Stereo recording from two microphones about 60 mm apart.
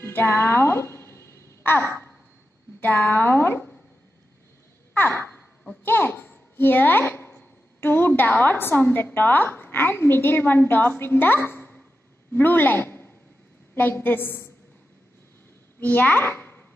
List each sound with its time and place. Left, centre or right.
0.0 s music: left
1.6 s a sound: left
2.8 s a woman's voice: left
4.9 s a sound: left
5.9 s a child's voice: left
15.8 s a child's voice: left